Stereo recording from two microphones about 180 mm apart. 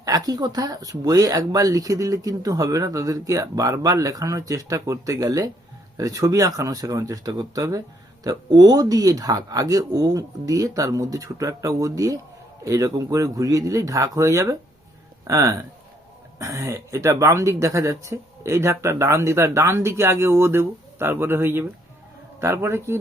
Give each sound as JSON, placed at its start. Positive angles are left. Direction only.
{"t": 0.0, "sound": "speech", "side_deg": -20}